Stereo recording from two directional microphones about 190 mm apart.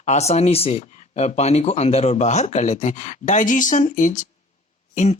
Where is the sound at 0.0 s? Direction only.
35° left (ahead or behind).